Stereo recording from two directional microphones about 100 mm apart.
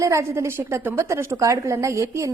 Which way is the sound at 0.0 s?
30° right (ahead or behind).